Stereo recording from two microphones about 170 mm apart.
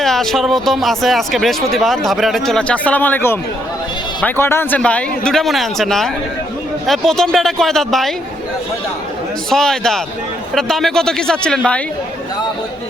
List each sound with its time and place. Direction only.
0.0 s speech: centre (ahead or behind)
9.5 s speech: 5° left (ahead or behind)